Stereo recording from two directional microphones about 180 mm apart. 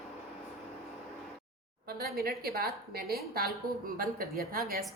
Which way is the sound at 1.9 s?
55° right (ahead or behind).